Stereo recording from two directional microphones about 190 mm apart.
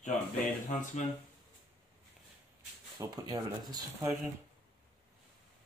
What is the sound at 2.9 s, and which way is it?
Speech, 20° right (ahead or behind).